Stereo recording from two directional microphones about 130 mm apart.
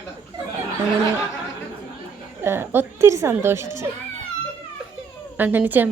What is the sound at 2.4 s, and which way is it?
A woman's voice, 20° right (ahead or behind).